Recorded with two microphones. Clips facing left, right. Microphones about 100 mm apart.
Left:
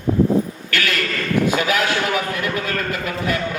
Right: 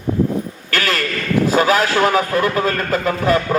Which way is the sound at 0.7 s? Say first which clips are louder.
Right 2 dB; 35° right (ahead or behind).